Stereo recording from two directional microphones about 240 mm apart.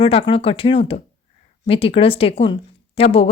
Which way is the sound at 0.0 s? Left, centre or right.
Left.